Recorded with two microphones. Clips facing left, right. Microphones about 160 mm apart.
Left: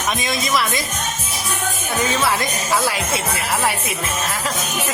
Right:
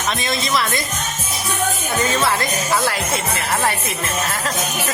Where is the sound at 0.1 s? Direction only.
10° left (ahead or behind).